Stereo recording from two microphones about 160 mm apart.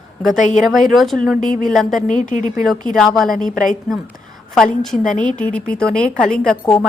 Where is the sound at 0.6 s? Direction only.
Centre (ahead or behind).